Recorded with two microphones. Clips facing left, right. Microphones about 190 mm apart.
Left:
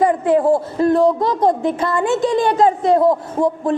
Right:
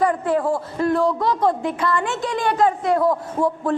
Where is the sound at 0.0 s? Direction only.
20° left (ahead or behind).